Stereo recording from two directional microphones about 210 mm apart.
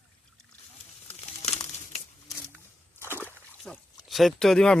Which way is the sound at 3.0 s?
10° left (ahead or behind).